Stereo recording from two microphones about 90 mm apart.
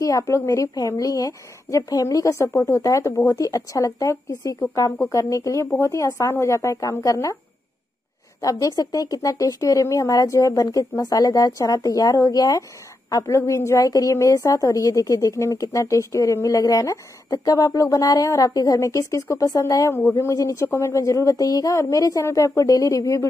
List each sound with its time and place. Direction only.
0.0 s a woman's voice: 35° left (ahead or behind)
3.3 s a woman's voice: 40° left (ahead or behind)
8.4 s a woman's voice: 40° left (ahead or behind)